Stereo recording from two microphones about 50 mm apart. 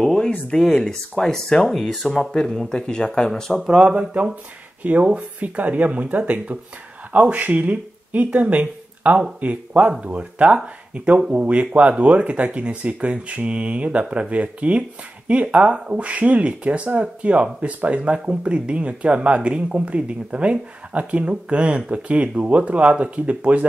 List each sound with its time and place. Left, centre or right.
0.0 s a sound: centre
0.6 s speech: centre
3.5 s speech: centre
3.8 s speech: right